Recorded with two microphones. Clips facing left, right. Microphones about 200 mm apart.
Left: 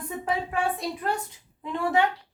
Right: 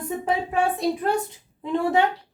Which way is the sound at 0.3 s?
25° right (ahead or behind).